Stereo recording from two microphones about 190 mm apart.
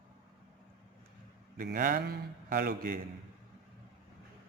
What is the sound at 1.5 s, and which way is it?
Speech, 45° right (ahead or behind).